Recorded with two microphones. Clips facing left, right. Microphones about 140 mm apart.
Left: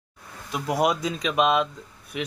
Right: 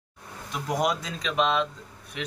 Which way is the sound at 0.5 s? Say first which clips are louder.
Left 3 dB; 10° left (ahead or behind).